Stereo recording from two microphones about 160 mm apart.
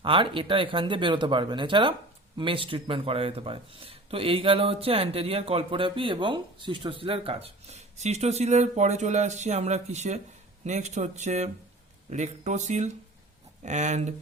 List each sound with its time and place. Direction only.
0.0 s speech: 35° right (ahead or behind)